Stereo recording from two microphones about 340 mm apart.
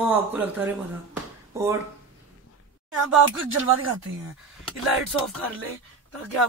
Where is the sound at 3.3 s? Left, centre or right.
Right.